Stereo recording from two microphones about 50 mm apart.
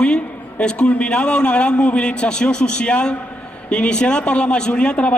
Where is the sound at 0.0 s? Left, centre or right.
Left.